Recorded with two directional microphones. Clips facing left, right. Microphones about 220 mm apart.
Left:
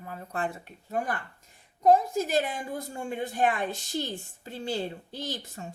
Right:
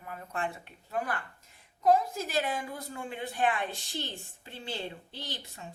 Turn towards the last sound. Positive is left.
turn(degrees=45)  # may be behind; listen again after turning